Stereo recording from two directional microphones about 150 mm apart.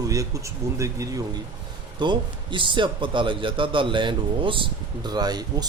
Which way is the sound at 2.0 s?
30° right (ahead or behind).